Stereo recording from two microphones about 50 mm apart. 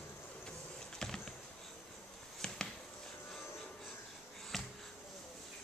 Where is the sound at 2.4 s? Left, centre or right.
Centre.